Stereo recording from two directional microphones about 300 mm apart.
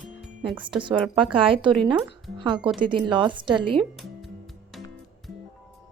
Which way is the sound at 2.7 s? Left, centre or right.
Centre.